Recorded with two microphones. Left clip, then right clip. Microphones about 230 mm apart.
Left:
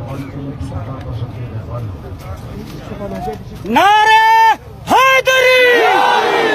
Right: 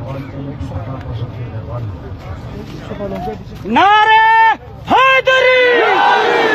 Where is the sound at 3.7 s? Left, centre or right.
Left.